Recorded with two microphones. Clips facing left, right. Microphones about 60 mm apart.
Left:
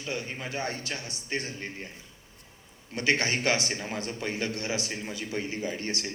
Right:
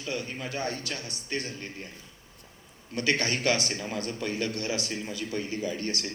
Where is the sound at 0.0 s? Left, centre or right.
Left.